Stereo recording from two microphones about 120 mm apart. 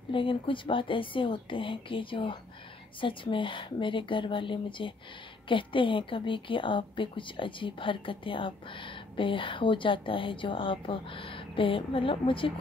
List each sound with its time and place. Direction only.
0.1 s a woman's voice: 45° left (ahead or behind)